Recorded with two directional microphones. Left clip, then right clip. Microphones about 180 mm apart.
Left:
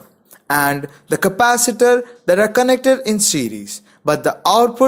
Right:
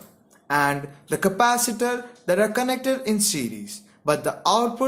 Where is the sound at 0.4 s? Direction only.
45° left (ahead or behind).